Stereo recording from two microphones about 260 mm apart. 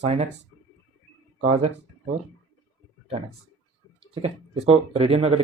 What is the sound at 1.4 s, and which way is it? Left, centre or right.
Speech, right.